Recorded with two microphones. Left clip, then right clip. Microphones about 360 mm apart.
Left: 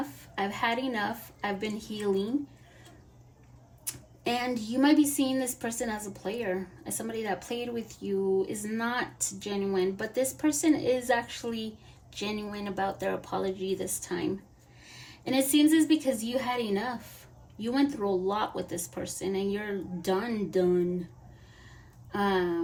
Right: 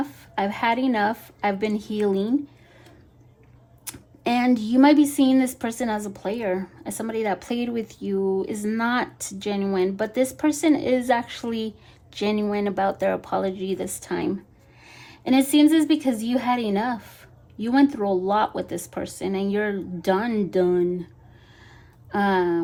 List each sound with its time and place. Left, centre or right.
0.3 s speech: right
4.3 s speech: right
22.2 s speech: right